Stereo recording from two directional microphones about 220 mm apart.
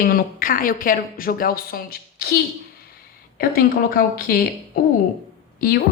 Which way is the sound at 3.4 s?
40° left (ahead or behind).